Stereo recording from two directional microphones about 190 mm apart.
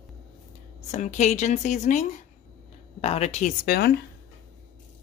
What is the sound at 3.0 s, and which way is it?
Speech, 35° left (ahead or behind).